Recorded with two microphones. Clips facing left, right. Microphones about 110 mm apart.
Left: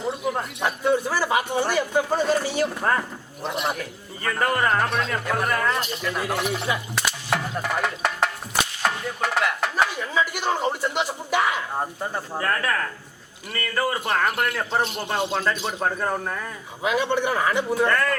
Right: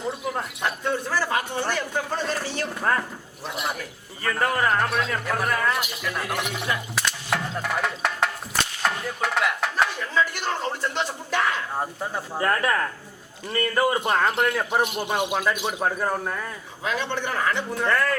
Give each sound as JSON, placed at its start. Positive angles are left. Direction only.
{"t": 0.0, "sound": "a man's voice", "side_deg": 0}
{"t": 6.1, "sound": "speech", "side_deg": 15}
{"t": 6.9, "sound": "speech", "side_deg": 5}
{"t": 12.4, "sound": "a man's voice", "side_deg": -15}
{"t": 16.8, "sound": "speech", "side_deg": 10}